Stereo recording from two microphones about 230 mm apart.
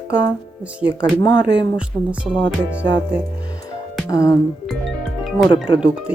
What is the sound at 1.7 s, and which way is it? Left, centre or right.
Speech, centre.